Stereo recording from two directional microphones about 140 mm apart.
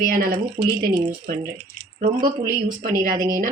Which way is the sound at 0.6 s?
70° right (ahead or behind).